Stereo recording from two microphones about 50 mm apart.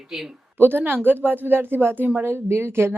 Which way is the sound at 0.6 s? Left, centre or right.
Right.